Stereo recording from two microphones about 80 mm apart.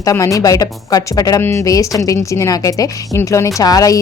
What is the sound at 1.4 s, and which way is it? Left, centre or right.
A woman's voice, left.